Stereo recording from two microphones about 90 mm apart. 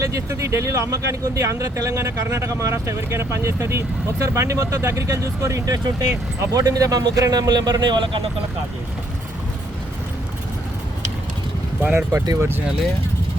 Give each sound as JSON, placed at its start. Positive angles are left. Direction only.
{"t": 0.0, "sound": "speech", "side_deg": -35}
{"t": 11.8, "sound": "speech", "side_deg": -20}
{"t": 12.1, "sound": "speech", "side_deg": -45}